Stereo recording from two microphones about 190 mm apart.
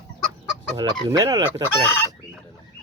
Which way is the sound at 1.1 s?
20° right (ahead or behind).